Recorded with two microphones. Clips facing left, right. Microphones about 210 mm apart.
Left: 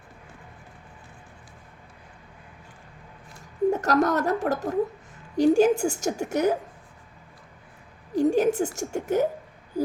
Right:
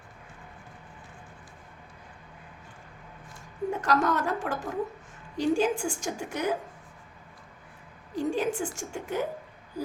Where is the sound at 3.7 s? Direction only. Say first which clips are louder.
Left 1 dB; 40° left (ahead or behind).